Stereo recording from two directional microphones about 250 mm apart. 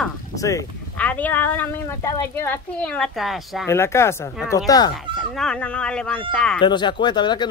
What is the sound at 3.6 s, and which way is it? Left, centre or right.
Speech, centre.